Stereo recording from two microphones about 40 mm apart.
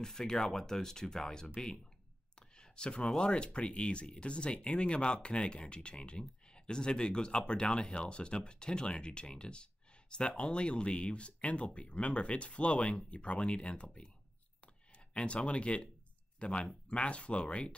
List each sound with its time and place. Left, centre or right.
0.0 s speech: centre
2.5 s a sound: left
3.2 s speech: left
15.1 s speech: left